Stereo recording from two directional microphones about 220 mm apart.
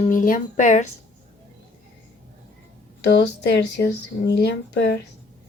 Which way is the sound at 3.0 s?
50° left (ahead or behind).